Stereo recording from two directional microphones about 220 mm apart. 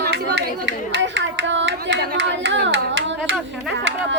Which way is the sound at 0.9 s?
55° right (ahead or behind).